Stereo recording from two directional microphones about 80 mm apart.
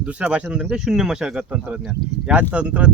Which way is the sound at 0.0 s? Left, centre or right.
Centre.